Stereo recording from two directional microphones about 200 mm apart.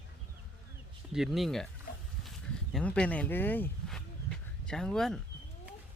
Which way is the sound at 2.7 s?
5° left (ahead or behind).